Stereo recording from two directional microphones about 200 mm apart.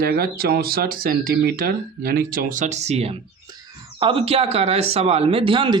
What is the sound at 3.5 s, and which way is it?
Speech, 20° right (ahead or behind).